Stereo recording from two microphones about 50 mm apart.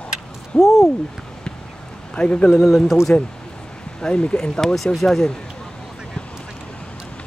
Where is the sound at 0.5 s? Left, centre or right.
Centre.